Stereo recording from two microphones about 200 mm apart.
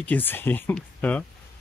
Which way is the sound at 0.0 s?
10° left (ahead or behind).